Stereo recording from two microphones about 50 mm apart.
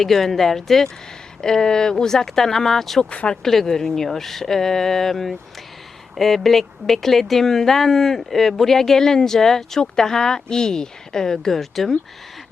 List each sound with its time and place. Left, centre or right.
0.0 s speech: centre
3.0 s speech: left
3.4 s speech: centre